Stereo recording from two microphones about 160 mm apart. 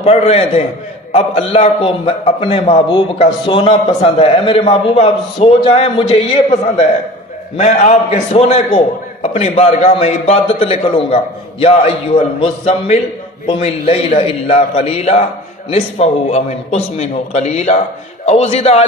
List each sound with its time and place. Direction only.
0.0 s a man's voice: 40° left (ahead or behind)
7.5 s a man's voice: 45° left (ahead or behind)